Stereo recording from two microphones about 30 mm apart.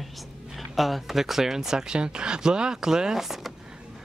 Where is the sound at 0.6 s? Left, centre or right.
Centre.